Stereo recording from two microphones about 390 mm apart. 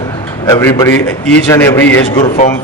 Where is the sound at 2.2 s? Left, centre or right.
Centre.